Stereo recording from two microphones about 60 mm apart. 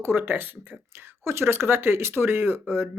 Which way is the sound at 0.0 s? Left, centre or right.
Right.